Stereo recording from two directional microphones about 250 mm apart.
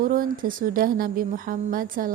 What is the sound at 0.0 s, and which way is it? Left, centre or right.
A woman's voice, right.